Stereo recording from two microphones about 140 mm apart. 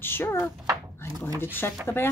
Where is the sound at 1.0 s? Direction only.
20° left (ahead or behind).